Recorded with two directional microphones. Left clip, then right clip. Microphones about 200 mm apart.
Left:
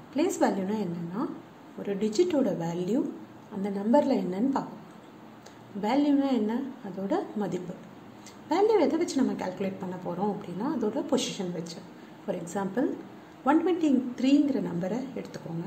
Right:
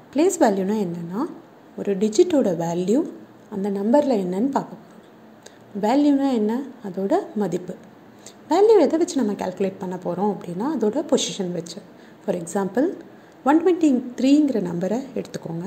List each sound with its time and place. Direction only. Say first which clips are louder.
0.1 s a woman's voice: right 8 dB; 35° right (ahead or behind)
5.8 s a woman's voice: right 7 dB; 35° right (ahead or behind)